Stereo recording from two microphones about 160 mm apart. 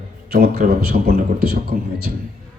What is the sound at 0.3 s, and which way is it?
A man's voice, 75° right (ahead or behind).